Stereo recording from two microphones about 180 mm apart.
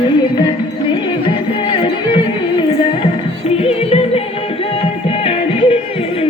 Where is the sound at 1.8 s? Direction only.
30° left (ahead or behind).